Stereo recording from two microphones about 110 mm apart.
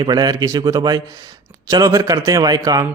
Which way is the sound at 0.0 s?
40° right (ahead or behind).